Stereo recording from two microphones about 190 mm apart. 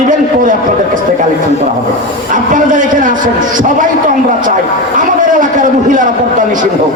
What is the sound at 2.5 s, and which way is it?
A man's voice, 45° right (ahead or behind).